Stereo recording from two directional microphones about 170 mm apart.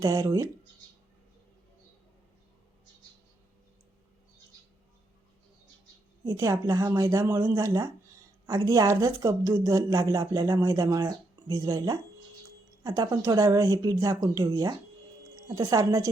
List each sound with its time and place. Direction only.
0.0 s a woman's voice: 20° right (ahead or behind)
6.2 s a woman's voice: 15° right (ahead or behind)